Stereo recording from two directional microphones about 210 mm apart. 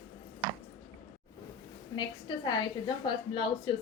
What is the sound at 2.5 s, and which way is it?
A woman's voice, 20° left (ahead or behind).